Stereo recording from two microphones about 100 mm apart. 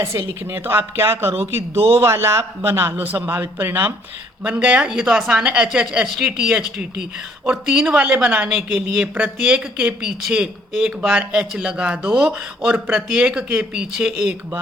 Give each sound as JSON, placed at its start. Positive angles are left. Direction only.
{"t": 0.0, "sound": "a woman's voice", "side_deg": -30}